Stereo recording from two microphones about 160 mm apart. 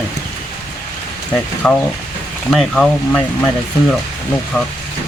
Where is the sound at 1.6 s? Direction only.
Centre (ahead or behind).